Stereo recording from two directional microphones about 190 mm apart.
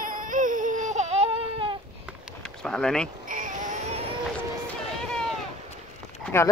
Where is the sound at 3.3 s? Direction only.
45° right (ahead or behind).